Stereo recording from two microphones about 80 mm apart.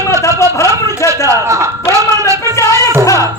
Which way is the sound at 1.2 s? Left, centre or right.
Right.